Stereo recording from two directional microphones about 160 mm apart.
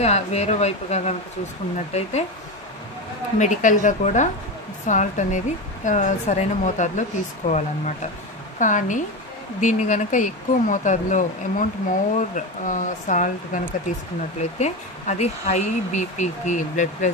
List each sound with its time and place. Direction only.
0.0 s speech: 40° left (ahead or behind)
3.3 s speech: 50° left (ahead or behind)